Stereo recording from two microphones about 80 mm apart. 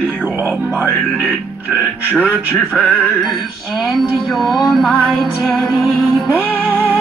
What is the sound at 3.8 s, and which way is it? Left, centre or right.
Speech, centre.